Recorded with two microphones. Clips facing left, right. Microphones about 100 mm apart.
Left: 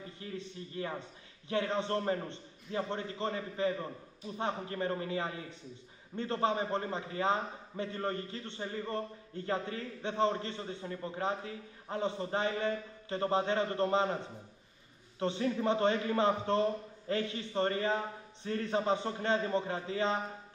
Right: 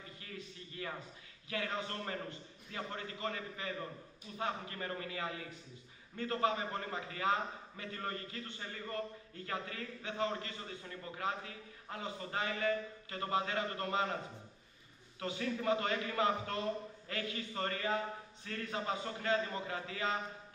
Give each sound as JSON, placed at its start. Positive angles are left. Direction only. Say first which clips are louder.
{"t": 0.2, "sound": "a sound", "louder": "left 8 dB", "side_deg": 30}
{"t": 1.5, "sound": "a man's voice", "louder": "left 8 dB", "side_deg": 30}
{"t": 15.1, "sound": "a man's voice", "louder": "left 6 dB", "side_deg": 30}